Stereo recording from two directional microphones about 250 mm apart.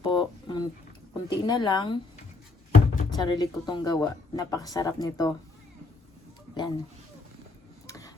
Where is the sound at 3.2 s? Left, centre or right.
Centre.